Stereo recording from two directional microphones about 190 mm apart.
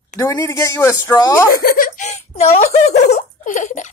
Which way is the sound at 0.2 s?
15° left (ahead or behind).